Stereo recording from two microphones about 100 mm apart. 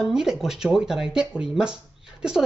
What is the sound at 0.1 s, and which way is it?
Speech, 5° right (ahead or behind).